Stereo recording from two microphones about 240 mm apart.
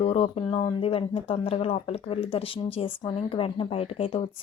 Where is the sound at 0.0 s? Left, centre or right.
Left.